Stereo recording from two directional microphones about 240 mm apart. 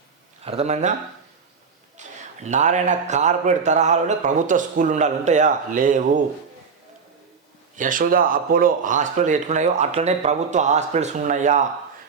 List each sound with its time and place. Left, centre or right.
0.4 s a man's voice: right
2.0 s a man's voice: right
7.8 s speech: right